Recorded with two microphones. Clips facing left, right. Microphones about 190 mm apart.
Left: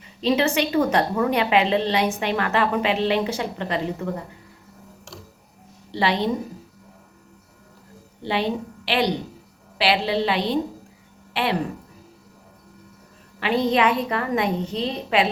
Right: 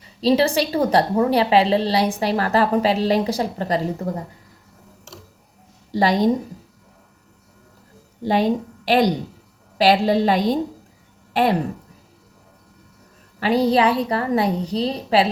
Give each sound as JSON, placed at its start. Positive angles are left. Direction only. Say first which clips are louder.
{"t": 0.0, "sound": "a woman's voice", "louder": "right 3 dB", "side_deg": -35}
{"t": 5.9, "sound": "a woman's voice", "louder": "right 5 dB", "side_deg": -40}
{"t": 8.2, "sound": "a woman's voice", "louder": "right 5 dB", "side_deg": -40}
{"t": 13.4, "sound": "a woman's voice", "louder": "right 3 dB", "side_deg": -35}